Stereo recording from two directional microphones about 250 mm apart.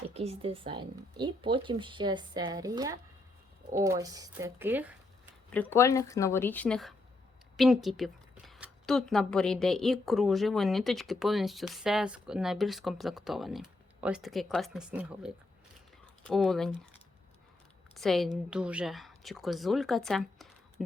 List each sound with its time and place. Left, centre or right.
0.1 s speech: right; by 4.9 s centre
5.5 s a woman's voice: centre
17.9 s speech: centre